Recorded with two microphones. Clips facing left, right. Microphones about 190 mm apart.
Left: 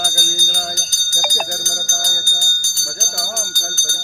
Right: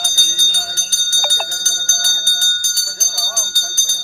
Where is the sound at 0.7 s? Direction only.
15° left (ahead or behind).